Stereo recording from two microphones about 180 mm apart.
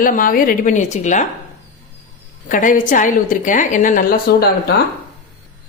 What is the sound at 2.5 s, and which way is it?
A woman's voice, 50° left (ahead or behind).